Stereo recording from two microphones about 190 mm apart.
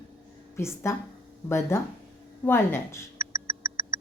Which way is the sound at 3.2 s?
15° right (ahead or behind).